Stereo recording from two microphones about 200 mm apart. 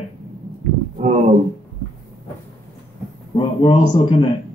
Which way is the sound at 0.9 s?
35° right (ahead or behind).